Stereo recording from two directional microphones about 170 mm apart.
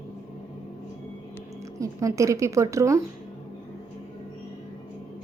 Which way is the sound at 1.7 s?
20° right (ahead or behind).